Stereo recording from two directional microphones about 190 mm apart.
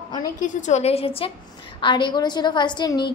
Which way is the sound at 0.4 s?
40° left (ahead or behind).